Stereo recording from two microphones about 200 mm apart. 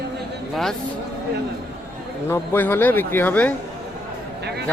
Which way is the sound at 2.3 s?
10° left (ahead or behind).